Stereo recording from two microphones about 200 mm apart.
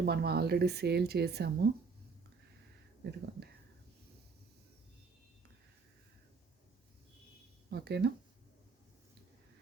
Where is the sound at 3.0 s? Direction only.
55° right (ahead or behind).